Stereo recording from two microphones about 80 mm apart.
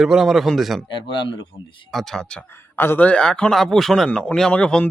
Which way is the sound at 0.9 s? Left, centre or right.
Left.